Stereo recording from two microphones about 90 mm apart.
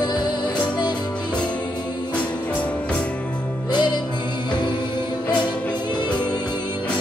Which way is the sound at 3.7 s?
55° left (ahead or behind).